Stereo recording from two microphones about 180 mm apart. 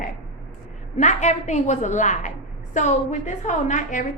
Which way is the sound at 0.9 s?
40° left (ahead or behind).